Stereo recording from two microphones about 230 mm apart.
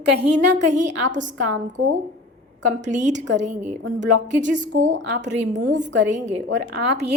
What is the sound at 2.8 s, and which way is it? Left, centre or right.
A woman's voice, right.